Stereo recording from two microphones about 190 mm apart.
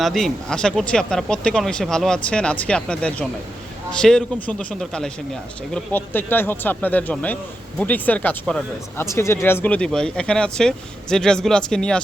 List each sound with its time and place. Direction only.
0.0 s speech: centre (ahead or behind)